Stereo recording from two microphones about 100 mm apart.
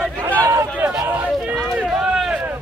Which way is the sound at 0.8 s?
20° right (ahead or behind).